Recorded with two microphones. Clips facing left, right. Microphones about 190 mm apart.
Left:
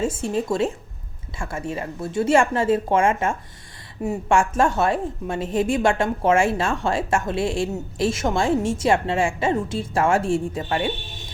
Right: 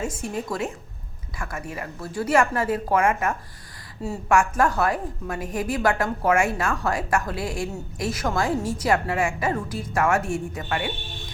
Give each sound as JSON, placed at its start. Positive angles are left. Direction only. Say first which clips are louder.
{"t": 0.0, "sound": "a woman's voice", "louder": "left 5 dB", "side_deg": 30}